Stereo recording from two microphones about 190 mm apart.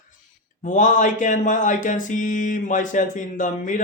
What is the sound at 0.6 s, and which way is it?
Mantra, 40° left (ahead or behind).